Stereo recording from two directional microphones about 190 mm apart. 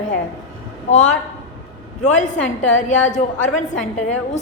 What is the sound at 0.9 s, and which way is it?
A woman's voice, 40° left (ahead or behind).